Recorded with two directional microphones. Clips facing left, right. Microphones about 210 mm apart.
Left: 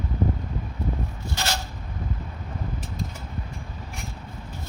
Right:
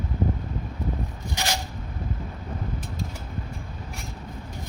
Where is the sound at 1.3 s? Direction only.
15° right (ahead or behind).